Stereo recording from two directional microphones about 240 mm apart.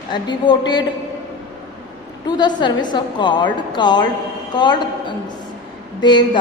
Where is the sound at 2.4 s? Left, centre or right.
Centre.